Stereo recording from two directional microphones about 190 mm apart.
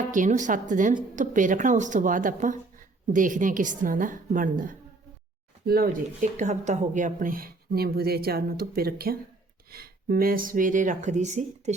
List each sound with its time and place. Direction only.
0.0 s a woman's voice: 40° right (ahead or behind)